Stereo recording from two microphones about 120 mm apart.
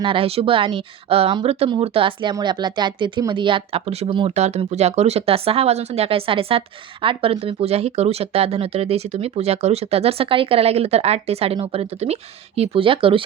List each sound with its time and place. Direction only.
0.0 s a woman's voice: 50° right (ahead or behind)
4.4 s speech: 70° right (ahead or behind); by 13.2 s 45° right (ahead or behind)